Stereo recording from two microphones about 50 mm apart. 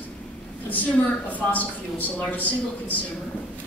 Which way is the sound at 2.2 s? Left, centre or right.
Left.